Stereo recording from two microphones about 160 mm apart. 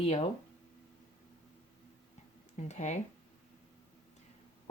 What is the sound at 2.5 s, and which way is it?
Speech, 45° left (ahead or behind).